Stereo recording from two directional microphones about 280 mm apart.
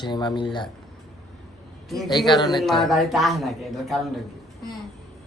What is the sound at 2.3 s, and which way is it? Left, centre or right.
Speech, centre.